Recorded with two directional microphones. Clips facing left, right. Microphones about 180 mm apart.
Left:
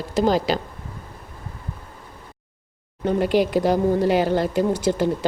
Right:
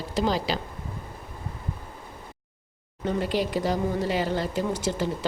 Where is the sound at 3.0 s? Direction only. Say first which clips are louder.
Left 7 dB; 55° left (ahead or behind).